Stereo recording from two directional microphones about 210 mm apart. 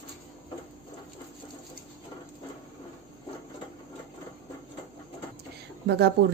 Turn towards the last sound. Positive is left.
turn(degrees=-55)  # may be behind; listen again after turning